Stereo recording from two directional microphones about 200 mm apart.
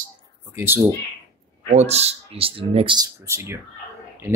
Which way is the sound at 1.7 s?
30° right (ahead or behind).